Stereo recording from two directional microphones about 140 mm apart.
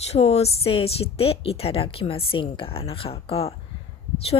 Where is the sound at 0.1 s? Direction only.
45° left (ahead or behind).